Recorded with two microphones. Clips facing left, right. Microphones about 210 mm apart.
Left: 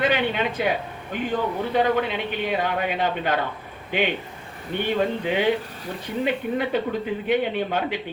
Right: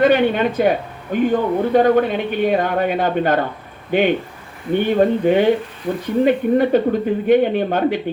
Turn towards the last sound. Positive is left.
turn(degrees=-45)  # may be behind; listen again after turning